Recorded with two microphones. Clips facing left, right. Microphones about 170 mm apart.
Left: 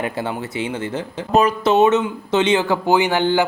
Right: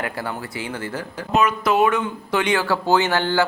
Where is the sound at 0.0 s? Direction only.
25° left (ahead or behind).